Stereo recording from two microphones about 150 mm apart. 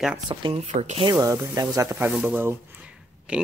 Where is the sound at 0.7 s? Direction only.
50° right (ahead or behind).